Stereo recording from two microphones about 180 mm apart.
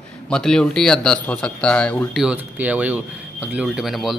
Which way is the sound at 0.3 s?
5° left (ahead or behind).